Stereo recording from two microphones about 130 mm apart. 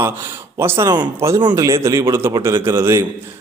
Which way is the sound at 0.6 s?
20° right (ahead or behind).